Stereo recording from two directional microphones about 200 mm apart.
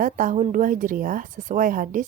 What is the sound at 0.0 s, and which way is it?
A woman's voice, 40° right (ahead or behind).